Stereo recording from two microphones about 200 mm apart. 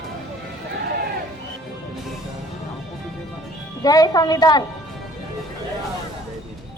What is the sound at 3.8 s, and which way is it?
Speech, 20° left (ahead or behind).